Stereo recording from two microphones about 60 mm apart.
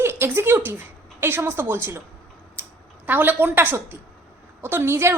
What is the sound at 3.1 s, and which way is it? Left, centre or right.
A woman's voice, right.